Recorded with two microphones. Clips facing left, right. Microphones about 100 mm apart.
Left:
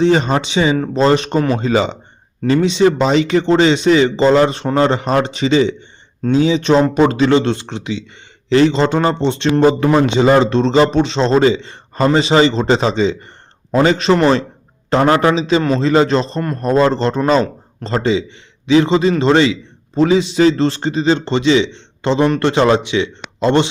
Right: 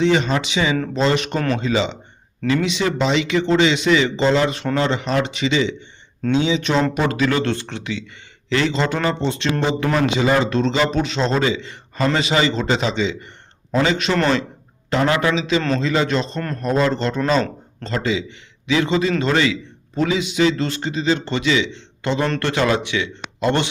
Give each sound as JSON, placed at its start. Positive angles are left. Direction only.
{"t": 0.0, "sound": "a man's voice", "side_deg": 35}
{"t": 9.6, "sound": "speech", "side_deg": 45}
{"t": 9.9, "sound": "a man's voice", "side_deg": 30}